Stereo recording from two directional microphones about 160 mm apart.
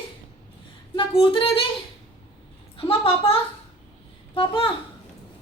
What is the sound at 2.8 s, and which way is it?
Speech, 35° left (ahead or behind).